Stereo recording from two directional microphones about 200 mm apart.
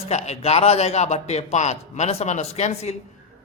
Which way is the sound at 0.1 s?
35° left (ahead or behind).